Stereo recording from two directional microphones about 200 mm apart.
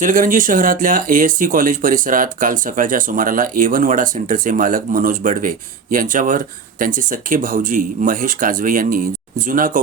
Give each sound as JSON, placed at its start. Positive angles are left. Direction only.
{"t": 0.0, "sound": "speech", "side_deg": -40}